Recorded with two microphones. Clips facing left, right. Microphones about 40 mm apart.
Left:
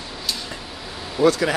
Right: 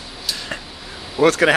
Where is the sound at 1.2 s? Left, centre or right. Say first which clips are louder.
Right 3 dB; right.